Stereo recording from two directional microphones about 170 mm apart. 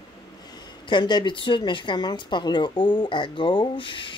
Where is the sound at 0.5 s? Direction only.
25° left (ahead or behind).